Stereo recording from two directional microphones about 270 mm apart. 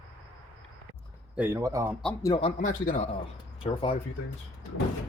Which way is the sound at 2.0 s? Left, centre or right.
Centre.